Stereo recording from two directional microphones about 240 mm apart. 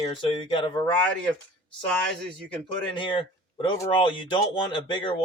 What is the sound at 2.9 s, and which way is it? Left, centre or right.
Speech, left.